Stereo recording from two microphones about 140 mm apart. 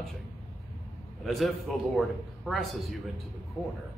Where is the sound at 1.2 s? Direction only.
Centre (ahead or behind).